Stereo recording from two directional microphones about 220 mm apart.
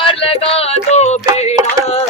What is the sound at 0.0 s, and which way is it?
Music, 25° left (ahead or behind).